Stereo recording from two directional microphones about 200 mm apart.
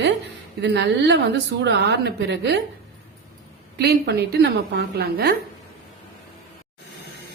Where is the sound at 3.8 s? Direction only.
55° right (ahead or behind).